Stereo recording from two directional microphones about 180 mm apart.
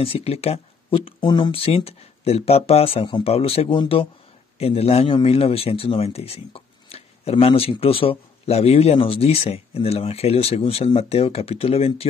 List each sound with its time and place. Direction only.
0.0 s speech: 30° left (ahead or behind)